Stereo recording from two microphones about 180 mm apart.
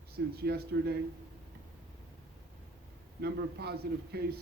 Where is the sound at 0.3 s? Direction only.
60° right (ahead or behind).